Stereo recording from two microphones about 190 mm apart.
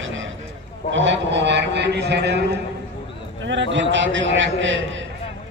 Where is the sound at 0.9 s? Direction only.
70° right (ahead or behind).